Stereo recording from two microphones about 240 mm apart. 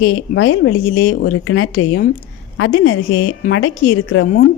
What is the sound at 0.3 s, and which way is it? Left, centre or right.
A woman's voice, left.